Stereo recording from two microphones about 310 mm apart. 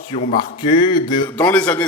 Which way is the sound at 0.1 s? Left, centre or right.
Left.